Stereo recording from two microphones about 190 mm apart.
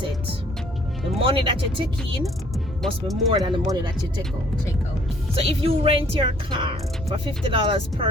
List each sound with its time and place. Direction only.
1.2 s speech: 30° right (ahead or behind)
2.8 s speech: centre (ahead or behind)
3.3 s speech: 25° right (ahead or behind)
5.3 s speech: 30° right (ahead or behind)